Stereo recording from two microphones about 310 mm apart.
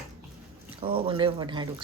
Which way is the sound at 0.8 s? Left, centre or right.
Centre.